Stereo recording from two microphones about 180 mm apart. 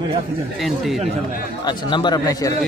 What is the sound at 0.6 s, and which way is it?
Speech, centre (ahead or behind).